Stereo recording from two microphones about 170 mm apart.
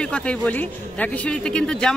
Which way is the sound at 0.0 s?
5° left (ahead or behind).